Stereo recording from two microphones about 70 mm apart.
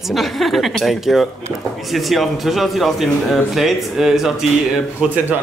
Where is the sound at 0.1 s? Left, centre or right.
Centre.